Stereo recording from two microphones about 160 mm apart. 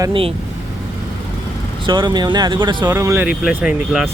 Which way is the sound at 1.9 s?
25° right (ahead or behind).